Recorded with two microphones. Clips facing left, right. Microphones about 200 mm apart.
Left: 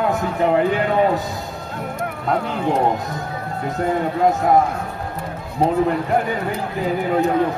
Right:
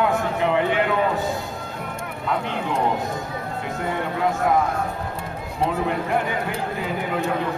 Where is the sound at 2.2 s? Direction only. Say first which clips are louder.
Left 3 dB; 40° left (ahead or behind).